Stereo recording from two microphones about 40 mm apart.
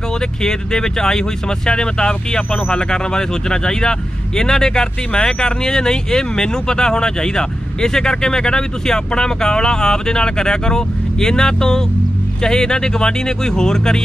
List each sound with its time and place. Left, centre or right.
0.4 s speech: centre